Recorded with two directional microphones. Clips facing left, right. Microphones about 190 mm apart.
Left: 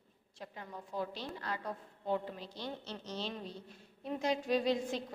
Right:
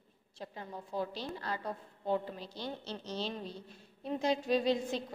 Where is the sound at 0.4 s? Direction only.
30° right (ahead or behind).